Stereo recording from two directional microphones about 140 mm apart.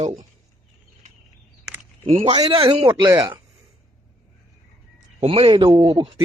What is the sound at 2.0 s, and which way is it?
Speech, 40° right (ahead or behind).